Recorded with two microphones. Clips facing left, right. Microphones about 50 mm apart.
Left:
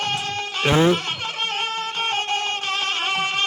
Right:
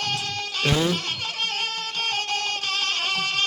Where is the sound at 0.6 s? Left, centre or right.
Left.